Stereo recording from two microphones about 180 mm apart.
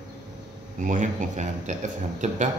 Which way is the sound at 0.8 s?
45° right (ahead or behind).